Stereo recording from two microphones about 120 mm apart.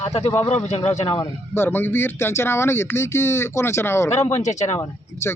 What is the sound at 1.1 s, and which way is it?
Speech, 20° left (ahead or behind).